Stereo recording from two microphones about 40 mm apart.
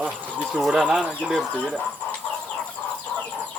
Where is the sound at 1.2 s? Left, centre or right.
Left.